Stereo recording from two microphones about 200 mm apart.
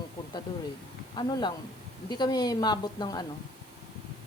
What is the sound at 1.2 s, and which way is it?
A woman's voice, 20° left (ahead or behind).